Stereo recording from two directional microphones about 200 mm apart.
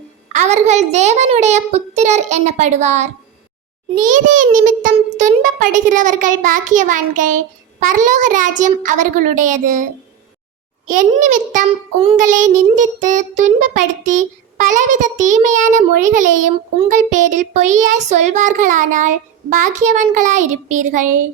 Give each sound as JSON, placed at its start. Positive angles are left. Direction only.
{"t": 0.3, "sound": "child singing", "side_deg": -35}
{"t": 10.8, "sound": "child singing", "side_deg": -40}